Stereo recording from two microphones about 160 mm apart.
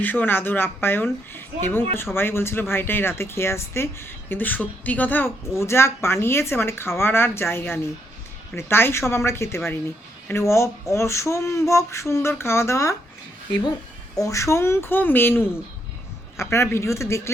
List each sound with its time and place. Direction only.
0.0 s speech: 10° left (ahead or behind)
14.2 s speech: 20° left (ahead or behind)